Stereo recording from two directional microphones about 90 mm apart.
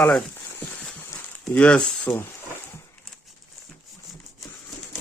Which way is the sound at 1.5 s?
10° left (ahead or behind).